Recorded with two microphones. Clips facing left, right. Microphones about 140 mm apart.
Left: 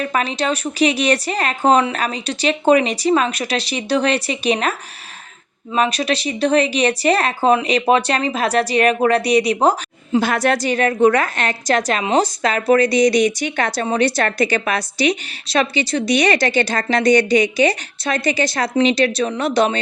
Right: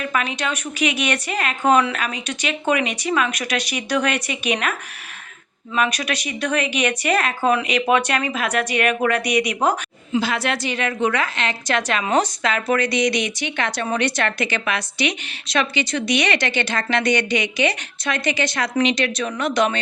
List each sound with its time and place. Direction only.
0.0 s a woman's voice: 35° left (ahead or behind)
10.2 s a woman's voice: 50° left (ahead or behind); by 19.8 s 30° left (ahead or behind)